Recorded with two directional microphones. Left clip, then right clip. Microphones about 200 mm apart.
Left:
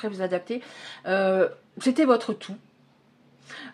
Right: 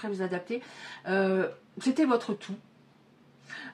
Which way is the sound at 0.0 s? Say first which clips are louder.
Left 5 dB; 40° left (ahead or behind).